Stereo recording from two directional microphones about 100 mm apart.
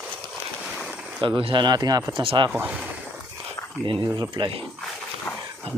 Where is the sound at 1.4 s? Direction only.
55° right (ahead or behind); by 2.2 s 40° right (ahead or behind).